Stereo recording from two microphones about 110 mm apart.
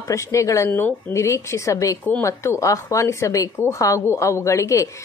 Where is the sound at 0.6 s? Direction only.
20° left (ahead or behind).